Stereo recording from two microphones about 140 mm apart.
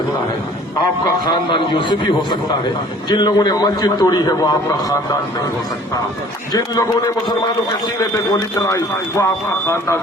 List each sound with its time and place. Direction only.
0.8 s a man's voice: 35° left (ahead or behind)
6.5 s speech: 25° left (ahead or behind)